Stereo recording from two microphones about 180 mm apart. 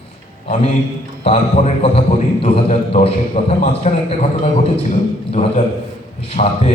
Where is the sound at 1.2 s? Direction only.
35° left (ahead or behind).